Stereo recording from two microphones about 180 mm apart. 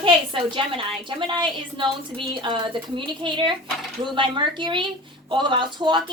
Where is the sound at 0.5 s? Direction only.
25° right (ahead or behind).